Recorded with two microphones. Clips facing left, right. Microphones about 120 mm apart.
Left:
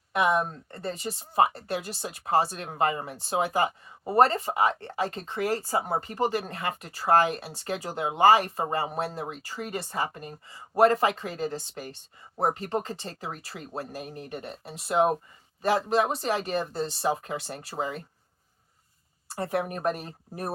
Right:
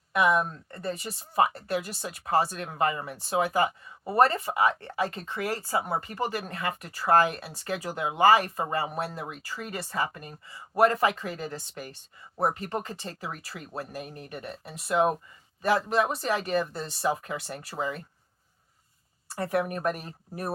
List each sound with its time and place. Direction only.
0.1 s speech: 25° left (ahead or behind)
19.4 s speech: 25° left (ahead or behind)